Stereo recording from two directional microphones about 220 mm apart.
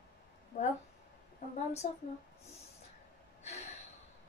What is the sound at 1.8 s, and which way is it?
Speech, 30° left (ahead or behind).